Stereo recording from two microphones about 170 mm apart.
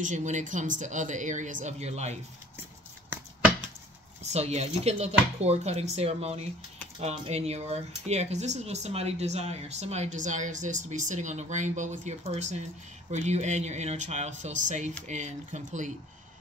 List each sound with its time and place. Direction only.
0.0 s a woman's voice: 45° right (ahead or behind)
4.2 s a woman's voice: 40° right (ahead or behind)